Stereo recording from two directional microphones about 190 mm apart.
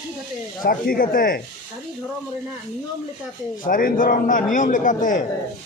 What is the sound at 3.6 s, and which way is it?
A man's voice, 45° left (ahead or behind).